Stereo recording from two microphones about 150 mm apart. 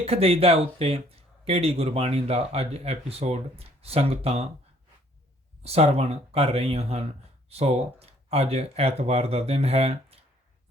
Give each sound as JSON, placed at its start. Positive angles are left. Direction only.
{"t": 0.0, "sound": "speech", "side_deg": -40}
{"t": 5.6, "sound": "speech", "side_deg": -45}